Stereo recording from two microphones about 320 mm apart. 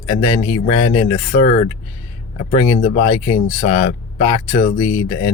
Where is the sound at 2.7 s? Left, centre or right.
Centre.